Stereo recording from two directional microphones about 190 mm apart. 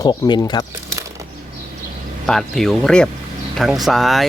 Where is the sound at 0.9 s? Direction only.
15° right (ahead or behind).